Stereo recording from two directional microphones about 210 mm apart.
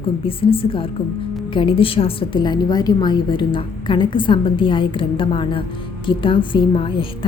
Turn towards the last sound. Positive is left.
turn(degrees=25)  # may be behind; listen again after turning